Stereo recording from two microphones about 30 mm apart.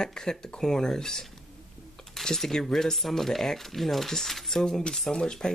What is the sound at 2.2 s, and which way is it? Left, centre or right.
Speech, centre.